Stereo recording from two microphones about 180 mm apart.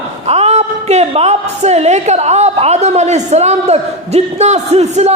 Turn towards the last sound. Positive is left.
turn(degrees=-35)  # may be behind; listen again after turning